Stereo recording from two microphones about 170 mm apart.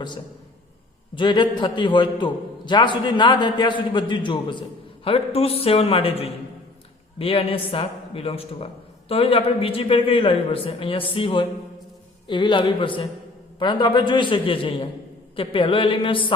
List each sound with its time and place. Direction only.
1.1 s a man's voice: 30° left (ahead or behind)